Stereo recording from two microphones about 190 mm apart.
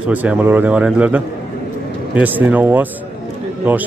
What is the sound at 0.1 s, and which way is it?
Speech, 10° right (ahead or behind).